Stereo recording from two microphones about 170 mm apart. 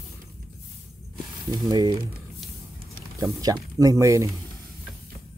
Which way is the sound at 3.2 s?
20° right (ahead or behind).